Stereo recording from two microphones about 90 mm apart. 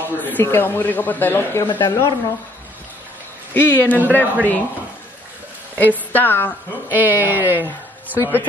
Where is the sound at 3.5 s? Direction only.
20° left (ahead or behind).